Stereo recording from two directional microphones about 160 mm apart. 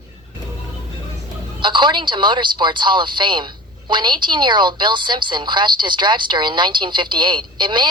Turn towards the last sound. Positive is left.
turn(degrees=-30)  # may be behind; listen again after turning